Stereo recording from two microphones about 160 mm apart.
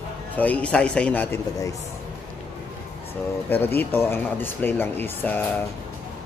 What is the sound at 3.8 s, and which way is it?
A man's voice, 15° left (ahead or behind).